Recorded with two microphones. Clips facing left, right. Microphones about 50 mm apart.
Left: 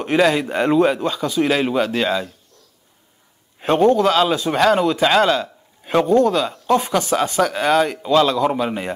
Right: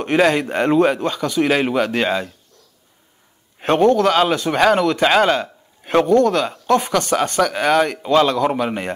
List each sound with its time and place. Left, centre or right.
0.3 s speech: centre
0.9 s a man's voice: centre
1.5 s speech: centre
3.5 s a sound: centre
3.8 s a man's voice: centre
4.1 s a man's voice: centre
5.9 s a man's voice: centre
6.4 s speech: centre
6.9 s speech: centre
7.5 s speech: centre
8.3 s speech: centre